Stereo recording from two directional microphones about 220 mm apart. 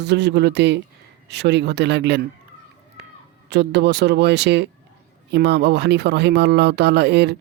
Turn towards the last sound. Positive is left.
turn(degrees=-50)  # may be behind; listen again after turning